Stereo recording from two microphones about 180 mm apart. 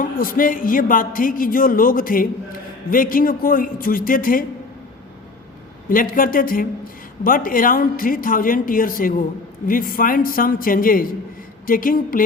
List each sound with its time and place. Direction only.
0.0 s a man's voice: 50° left (ahead or behind)
5.9 s a man's voice: 50° left (ahead or behind)